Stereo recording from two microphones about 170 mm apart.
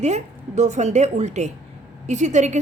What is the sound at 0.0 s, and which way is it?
A woman's voice, 40° right (ahead or behind).